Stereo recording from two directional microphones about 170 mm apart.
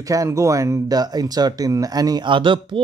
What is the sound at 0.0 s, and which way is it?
Speech, 20° right (ahead or behind).